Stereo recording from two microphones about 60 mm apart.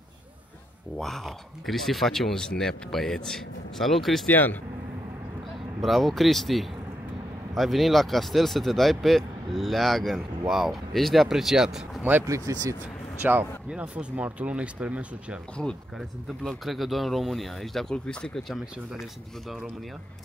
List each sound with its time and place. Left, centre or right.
0.9 s speech: centre
4.3 s speech: left
5.8 s speech: centre
12.0 s speech: right
12.5 s speech: right
13.2 s speech: right
13.7 s speech: right
16.4 s speech: centre
17.9 s speech: centre